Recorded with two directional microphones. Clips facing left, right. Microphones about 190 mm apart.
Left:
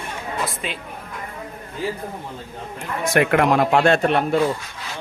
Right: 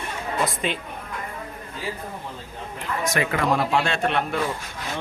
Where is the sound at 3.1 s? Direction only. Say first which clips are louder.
Left 7 dB; 60° left (ahead or behind); by 4.4 s 40° left (ahead or behind).